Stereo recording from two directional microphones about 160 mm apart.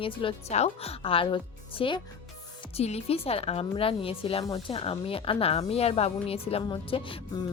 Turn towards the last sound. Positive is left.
turn(degrees=35)  # may be behind; listen again after turning